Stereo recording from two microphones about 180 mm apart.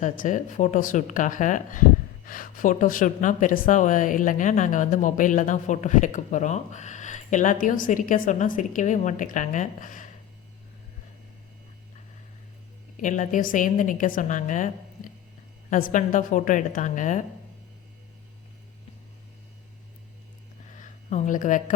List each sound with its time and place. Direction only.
0.0 s speech: 45° left (ahead or behind)
13.0 s speech: 45° left (ahead or behind)
20.7 s a sound: 45° left (ahead or behind)